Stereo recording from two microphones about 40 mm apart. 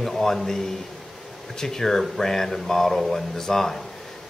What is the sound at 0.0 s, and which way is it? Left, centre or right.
A man's voice, centre.